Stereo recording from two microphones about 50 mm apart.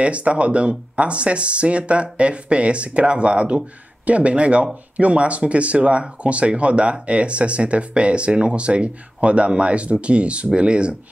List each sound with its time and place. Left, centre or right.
0.0 s speech: right